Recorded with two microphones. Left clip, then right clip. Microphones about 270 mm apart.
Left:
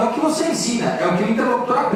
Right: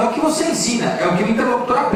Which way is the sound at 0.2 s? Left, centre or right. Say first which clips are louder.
Right 1 dB; centre.